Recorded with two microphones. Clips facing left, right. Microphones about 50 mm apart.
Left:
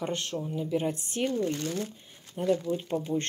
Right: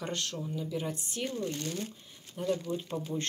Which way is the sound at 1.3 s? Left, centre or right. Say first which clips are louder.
Left 5 dB; left.